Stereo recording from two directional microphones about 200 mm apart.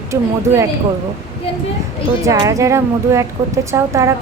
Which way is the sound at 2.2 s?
15° right (ahead or behind).